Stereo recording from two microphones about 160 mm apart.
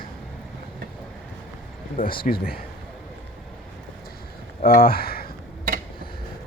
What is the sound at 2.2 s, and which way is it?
Speech, 70° left (ahead or behind).